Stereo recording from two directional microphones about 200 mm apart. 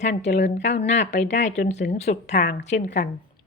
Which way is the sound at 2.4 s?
55° left (ahead or behind).